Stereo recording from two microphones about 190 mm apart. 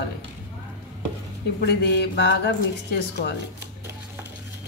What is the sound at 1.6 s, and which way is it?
Speech, 60° left (ahead or behind).